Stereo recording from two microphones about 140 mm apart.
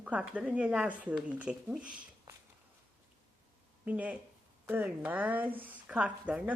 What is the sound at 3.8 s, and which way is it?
Speech, 10° right (ahead or behind).